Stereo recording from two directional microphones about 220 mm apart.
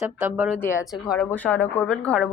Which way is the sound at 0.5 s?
10° left (ahead or behind).